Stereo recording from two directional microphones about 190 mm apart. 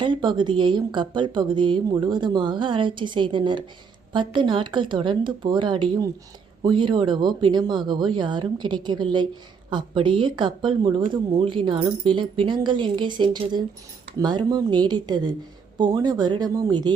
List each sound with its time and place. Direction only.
0.0 s a woman's voice: 25° right (ahead or behind)